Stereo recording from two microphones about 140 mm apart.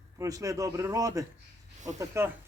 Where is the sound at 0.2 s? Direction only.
25° right (ahead or behind).